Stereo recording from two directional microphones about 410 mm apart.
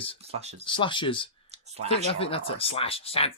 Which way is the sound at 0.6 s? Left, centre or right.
Centre.